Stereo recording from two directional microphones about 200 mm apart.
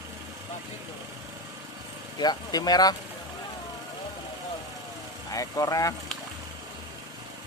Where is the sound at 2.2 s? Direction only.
20° left (ahead or behind).